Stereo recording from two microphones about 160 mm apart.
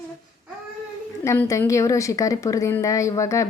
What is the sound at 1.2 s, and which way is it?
A woman's voice, 15° left (ahead or behind).